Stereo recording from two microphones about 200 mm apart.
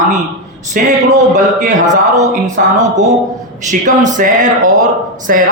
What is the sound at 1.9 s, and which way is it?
Speech, 40° right (ahead or behind).